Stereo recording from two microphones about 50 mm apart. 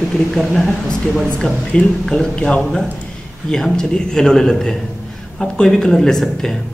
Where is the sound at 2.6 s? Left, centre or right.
Centre.